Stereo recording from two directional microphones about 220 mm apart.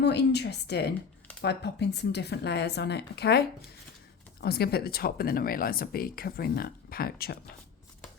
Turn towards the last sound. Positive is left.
turn(degrees=45)  # may be behind; listen again after turning